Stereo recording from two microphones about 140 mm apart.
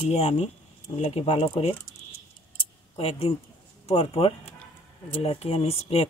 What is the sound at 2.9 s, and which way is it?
Speech, 45° left (ahead or behind).